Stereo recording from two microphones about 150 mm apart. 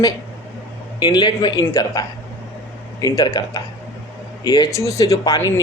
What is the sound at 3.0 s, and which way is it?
Speech, 25° left (ahead or behind).